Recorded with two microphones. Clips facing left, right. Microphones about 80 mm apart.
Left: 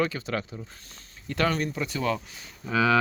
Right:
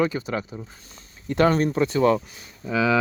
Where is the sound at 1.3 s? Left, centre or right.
Right.